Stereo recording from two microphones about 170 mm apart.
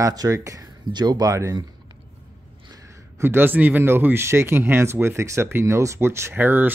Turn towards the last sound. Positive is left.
turn(degrees=-10)  # may be behind; listen again after turning